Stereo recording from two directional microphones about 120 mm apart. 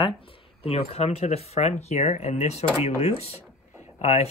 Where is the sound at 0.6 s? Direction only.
55° left (ahead or behind).